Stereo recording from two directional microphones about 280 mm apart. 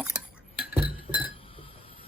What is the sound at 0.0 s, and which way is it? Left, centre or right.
Chink, centre.